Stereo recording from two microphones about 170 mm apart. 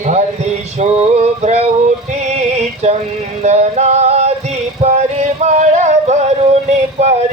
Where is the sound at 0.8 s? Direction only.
40° right (ahead or behind).